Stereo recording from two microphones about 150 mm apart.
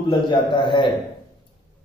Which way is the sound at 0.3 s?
30° left (ahead or behind).